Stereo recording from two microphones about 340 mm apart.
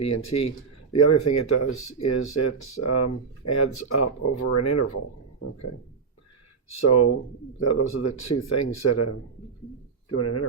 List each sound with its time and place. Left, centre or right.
0.0 s speech: left
6.7 s speech: left